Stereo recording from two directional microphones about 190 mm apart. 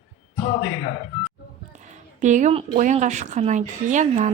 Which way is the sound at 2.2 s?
40° right (ahead or behind).